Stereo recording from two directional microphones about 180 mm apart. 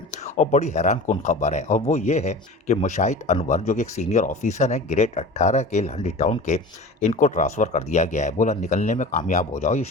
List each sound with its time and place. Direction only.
0.1 s speech: 40° left (ahead or behind)